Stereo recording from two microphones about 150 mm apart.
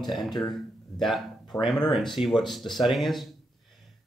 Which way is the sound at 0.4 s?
Centre (ahead or behind).